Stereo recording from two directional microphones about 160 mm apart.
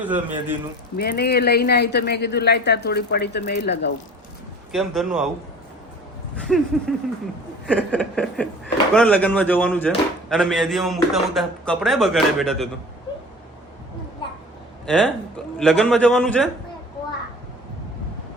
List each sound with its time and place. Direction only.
0.0 s a man's voice: 10° right (ahead or behind)
0.9 s speech: 85° left
4.7 s speech: centre (ahead or behind)
6.3 s speech: 5° left (ahead or behind)
7.7 s a sound: 10° left (ahead or behind)
9.0 s speech: 10° left (ahead or behind)
14.8 s a man's voice: 5° left (ahead or behind)